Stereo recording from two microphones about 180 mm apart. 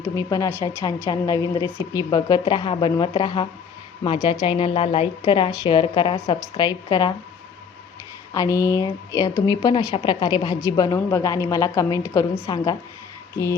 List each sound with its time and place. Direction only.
0.2 s a woman's voice: 15° left (ahead or behind)
8.3 s a woman's voice: 20° left (ahead or behind)